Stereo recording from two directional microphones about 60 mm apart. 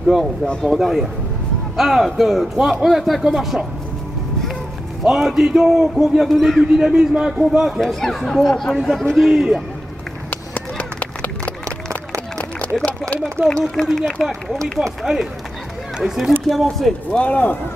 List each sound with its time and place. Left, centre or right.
0.7 s a man's voice: centre
5.0 s a man's voice: centre
6.6 s a man's voice: centre
7.8 s a man's voice: centre
10.3 s run: left
13.5 s speech: centre
14.8 s a man's voice: centre
17.1 s speech: left